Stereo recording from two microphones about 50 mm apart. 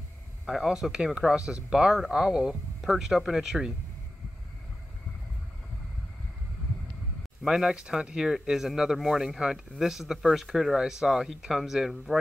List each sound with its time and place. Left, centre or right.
0.5 s speech: centre
7.4 s speech: centre